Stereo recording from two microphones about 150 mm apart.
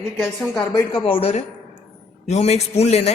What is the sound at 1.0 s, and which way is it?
A man's voice, 40° left (ahead or behind).